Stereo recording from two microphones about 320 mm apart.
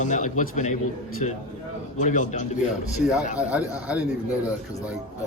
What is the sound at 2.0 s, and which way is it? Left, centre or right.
Speech, left.